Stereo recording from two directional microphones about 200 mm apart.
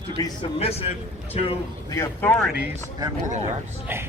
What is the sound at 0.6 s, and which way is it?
Speech, 30° left (ahead or behind).